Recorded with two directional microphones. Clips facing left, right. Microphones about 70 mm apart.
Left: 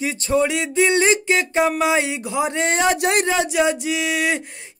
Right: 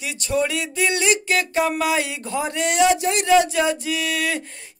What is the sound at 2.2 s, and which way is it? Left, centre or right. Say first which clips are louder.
Speech: left 3 dB; centre.